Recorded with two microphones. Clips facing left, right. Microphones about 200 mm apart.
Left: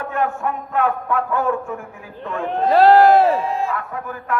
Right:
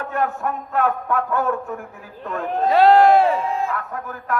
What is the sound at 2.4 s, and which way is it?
Speech, centre (ahead or behind).